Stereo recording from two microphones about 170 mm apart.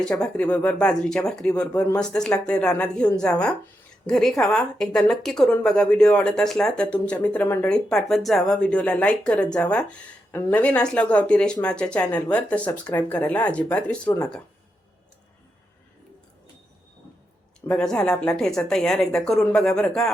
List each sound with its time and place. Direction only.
0.0 s a woman's voice: 5° left (ahead or behind)
17.9 s a woman's voice: 5° left (ahead or behind)